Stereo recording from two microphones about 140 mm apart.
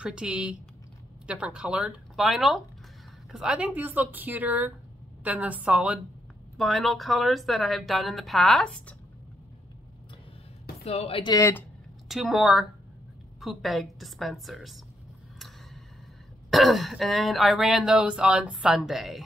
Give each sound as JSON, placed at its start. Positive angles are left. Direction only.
{"t": 0.0, "sound": "speech", "side_deg": -5}
{"t": 10.8, "sound": "speech", "side_deg": 45}
{"t": 11.3, "sound": "speech", "side_deg": 20}
{"t": 12.1, "sound": "speech", "side_deg": -5}
{"t": 15.3, "sound": "a sound", "side_deg": 0}
{"t": 16.4, "sound": "speech", "side_deg": 0}